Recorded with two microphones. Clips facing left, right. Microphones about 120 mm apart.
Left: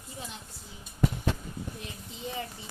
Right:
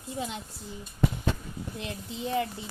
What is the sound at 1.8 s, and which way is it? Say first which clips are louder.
Speech: right 5 dB; 90° right.